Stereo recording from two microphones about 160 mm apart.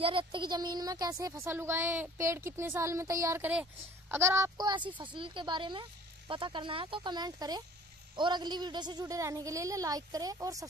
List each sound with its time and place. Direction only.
0.0 s speech: 35° right (ahead or behind)